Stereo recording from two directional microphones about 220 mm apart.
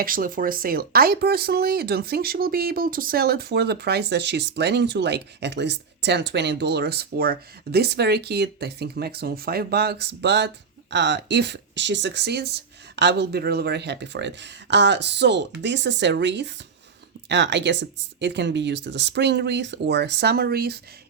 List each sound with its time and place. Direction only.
0.0 s speech: 40° right (ahead or behind)